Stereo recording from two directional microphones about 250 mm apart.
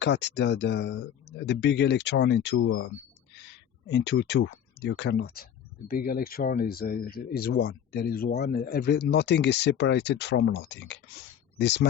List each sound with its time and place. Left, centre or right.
0.0 s speech: left